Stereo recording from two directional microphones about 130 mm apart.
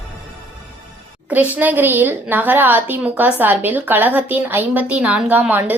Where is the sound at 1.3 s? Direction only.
10° right (ahead or behind).